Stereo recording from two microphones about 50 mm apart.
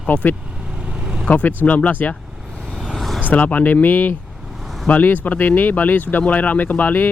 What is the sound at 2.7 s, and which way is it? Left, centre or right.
Vehicle, centre.